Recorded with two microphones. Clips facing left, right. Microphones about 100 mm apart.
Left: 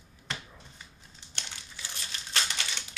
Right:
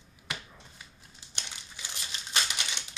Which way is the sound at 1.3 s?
20° right (ahead or behind).